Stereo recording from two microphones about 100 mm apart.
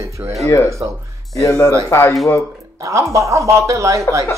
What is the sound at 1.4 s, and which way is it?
Speech, 25° left (ahead or behind).